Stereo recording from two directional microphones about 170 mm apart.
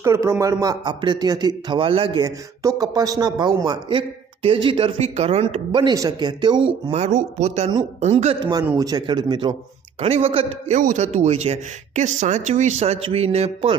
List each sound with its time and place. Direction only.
0.0 s speech: 15° right (ahead or behind)
2.1 s speech: 20° right (ahead or behind)
6.9 s speech: 45° right (ahead or behind); by 9.6 s 25° right (ahead or behind)
10.0 s speech: 35° right (ahead or behind)
10.8 s speech: 45° right (ahead or behind)